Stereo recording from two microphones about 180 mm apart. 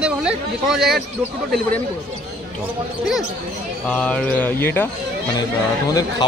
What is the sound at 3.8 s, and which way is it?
Speech, 5° left (ahead or behind).